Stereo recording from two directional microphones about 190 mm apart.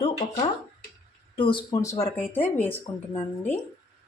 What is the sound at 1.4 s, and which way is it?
A woman's voice, 25° left (ahead or behind).